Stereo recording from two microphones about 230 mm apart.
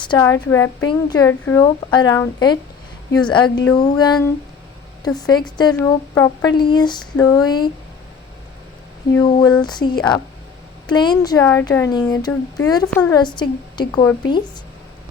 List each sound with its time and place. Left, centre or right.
0.0 s a woman's voice: centre
9.1 s a woman's voice: centre